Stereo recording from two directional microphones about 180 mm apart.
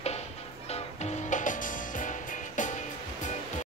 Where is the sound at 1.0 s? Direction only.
45° left (ahead or behind).